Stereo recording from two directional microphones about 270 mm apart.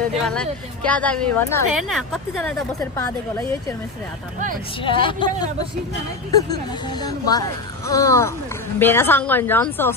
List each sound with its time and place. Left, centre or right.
0.2 s a woman's voice: centre
4.8 s a woman's voice: centre